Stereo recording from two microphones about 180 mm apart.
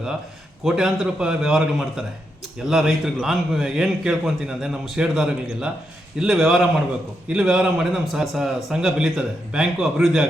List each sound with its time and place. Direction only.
0.6 s a man's voice: 5° right (ahead or behind)